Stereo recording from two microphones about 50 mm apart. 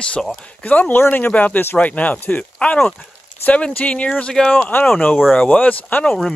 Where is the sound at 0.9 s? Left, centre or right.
Left.